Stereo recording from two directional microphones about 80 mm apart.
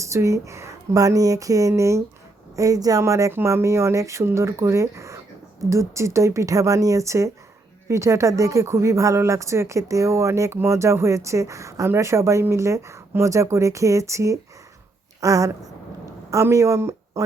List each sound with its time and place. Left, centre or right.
0.0 s speech: right